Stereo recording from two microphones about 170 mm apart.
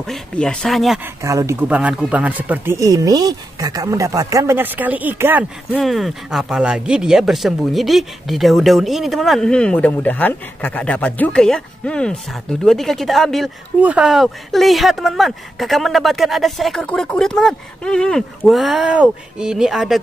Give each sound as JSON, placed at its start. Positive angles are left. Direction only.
{"t": 0.0, "sound": "speech", "side_deg": 5}
{"t": 1.2, "sound": "speech", "side_deg": -20}
{"t": 5.7, "sound": "speech", "side_deg": 0}